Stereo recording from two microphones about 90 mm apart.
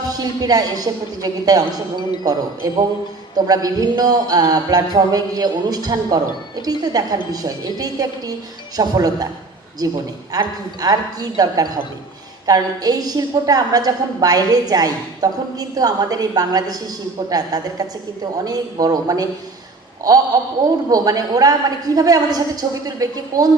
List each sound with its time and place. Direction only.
0.1 s music: 45° right (ahead or behind)
20.3 s music: 45° right (ahead or behind)
22.9 s a woman's voice: 40° right (ahead or behind)